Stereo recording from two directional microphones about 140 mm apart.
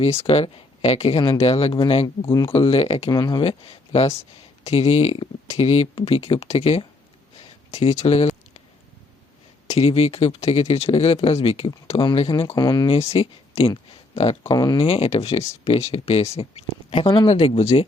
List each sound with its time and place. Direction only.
0.0 s speech: 45° left (ahead or behind)
3.1 s speech: 30° left (ahead or behind)
3.4 s speech: 45° left (ahead or behind)
9.6 s speech: 45° left (ahead or behind)
12.5 s speech: 30° left (ahead or behind)
12.9 s speech: 45° left (ahead or behind)
14.4 s speech: 30° left (ahead or behind)
14.8 s speech: 45° left (ahead or behind)